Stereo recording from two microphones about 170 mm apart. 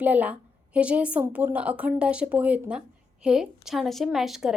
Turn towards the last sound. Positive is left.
turn(degrees=0)  # may be behind; listen again after turning